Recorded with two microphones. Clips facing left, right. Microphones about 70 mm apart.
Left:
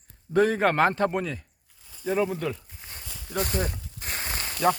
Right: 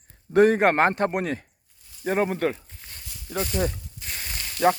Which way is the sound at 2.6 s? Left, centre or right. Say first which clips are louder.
Left 1 dB; centre.